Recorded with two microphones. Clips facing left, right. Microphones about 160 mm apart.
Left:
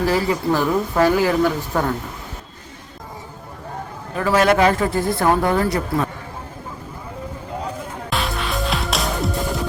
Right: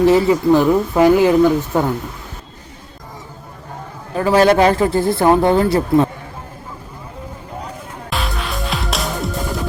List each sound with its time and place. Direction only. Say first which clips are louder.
0.0 s speech: right 7 dB; 20° right (ahead or behind)
4.2 s speech: right 4 dB; 30° right (ahead or behind)
8.1 s music: even; centre (ahead or behind)